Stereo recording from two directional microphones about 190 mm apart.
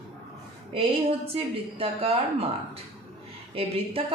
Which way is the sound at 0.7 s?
30° right (ahead or behind).